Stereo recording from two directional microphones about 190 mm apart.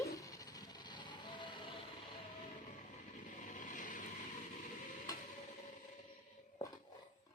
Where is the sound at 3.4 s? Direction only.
45° left (ahead or behind).